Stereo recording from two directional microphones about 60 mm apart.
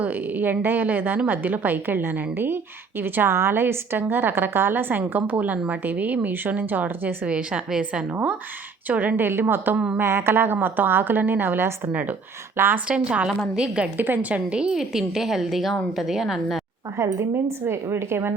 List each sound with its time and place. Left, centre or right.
0.0 s a woman's voice: right
7.3 s a woman's voice: centre; by 9.7 s right
9.7 s a woman's voice: centre
10.0 s a woman's voice: right
12.9 s a woman's voice: centre
13.9 s a woman's voice: right
14.6 s a woman's voice: centre
17.0 s speech: right